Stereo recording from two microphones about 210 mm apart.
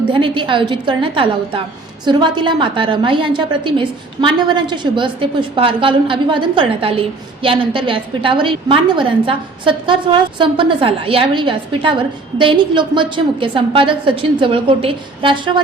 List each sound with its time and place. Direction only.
0.1 s a woman's voice: 25° right (ahead or behind)